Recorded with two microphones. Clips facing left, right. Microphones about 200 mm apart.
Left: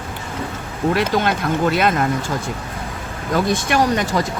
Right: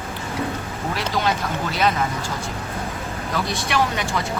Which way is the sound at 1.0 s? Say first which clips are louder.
Left 1 dB; 55° left (ahead or behind).